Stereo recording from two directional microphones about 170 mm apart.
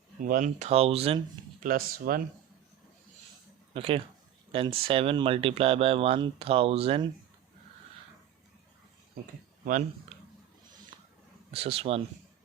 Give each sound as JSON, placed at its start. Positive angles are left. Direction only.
{"t": 0.3, "sound": "speech", "side_deg": -50}
{"t": 1.6, "sound": "speech", "side_deg": -55}
{"t": 3.8, "sound": "speech", "side_deg": -30}
{"t": 11.5, "sound": "speech", "side_deg": -35}